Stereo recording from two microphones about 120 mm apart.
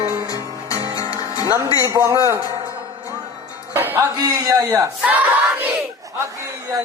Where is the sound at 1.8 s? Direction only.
30° right (ahead or behind).